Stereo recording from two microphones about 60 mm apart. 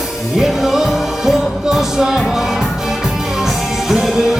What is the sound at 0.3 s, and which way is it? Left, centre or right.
Music, centre.